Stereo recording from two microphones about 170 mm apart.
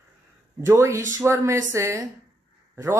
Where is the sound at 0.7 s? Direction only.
15° right (ahead or behind).